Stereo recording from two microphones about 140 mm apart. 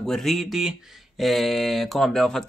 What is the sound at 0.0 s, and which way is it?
Speech, centre (ahead or behind).